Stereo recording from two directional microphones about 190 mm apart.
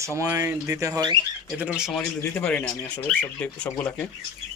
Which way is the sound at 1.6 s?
5° right (ahead or behind).